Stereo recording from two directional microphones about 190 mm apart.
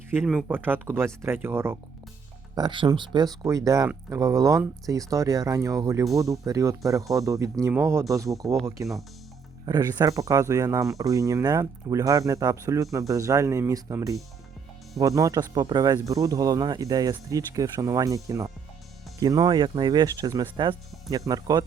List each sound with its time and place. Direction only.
0.1 s speech: 5° right (ahead or behind)
8.4 s speech: centre (ahead or behind)
8.8 s speech: 15° right (ahead or behind)